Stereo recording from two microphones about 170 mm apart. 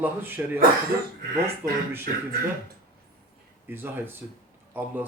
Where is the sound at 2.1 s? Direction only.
55° right (ahead or behind).